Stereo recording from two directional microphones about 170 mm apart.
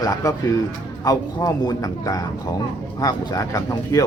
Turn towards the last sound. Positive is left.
turn(degrees=20)  # may be behind; listen again after turning